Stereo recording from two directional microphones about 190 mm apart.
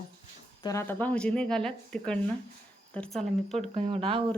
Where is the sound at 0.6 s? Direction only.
15° left (ahead or behind).